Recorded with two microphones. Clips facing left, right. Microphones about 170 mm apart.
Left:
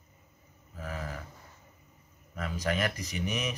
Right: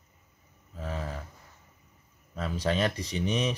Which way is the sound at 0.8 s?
30° right (ahead or behind).